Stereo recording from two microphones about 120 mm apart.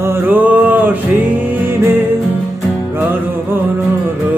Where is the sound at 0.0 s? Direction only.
15° right (ahead or behind).